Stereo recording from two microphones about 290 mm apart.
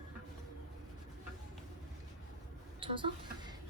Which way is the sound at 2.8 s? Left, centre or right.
Centre.